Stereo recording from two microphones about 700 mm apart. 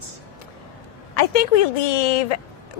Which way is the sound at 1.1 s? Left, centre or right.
Left.